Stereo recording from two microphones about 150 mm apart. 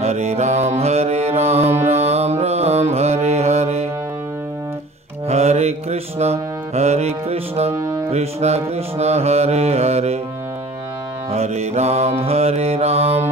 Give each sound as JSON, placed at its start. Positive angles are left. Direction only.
{"t": 0.0, "sound": "mantra", "side_deg": -45}
{"t": 1.8, "sound": "music", "side_deg": -45}
{"t": 5.3, "sound": "music", "side_deg": -45}
{"t": 11.3, "sound": "mantra", "side_deg": -45}